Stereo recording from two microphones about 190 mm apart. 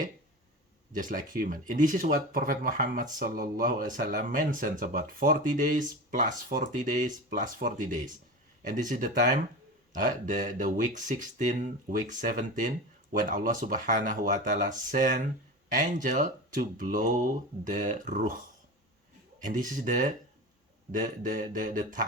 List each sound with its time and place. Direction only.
0.9 s speech: 45° right (ahead or behind)
19.4 s speech: 45° right (ahead or behind)